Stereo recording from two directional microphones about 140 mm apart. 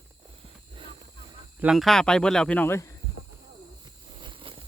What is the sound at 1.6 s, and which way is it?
Speech, centre (ahead or behind).